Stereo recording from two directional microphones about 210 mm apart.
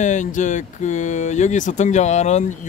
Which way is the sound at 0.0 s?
35° left (ahead or behind).